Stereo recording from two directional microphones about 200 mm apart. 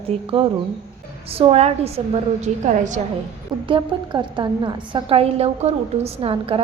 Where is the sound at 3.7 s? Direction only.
25° right (ahead or behind).